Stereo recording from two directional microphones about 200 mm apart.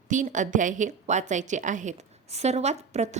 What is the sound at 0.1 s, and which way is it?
A woman's voice, 40° right (ahead or behind).